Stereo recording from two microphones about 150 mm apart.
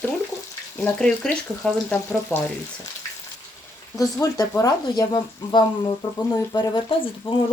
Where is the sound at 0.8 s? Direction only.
10° left (ahead or behind).